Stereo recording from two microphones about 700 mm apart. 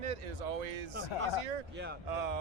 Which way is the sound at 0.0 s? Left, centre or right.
Right.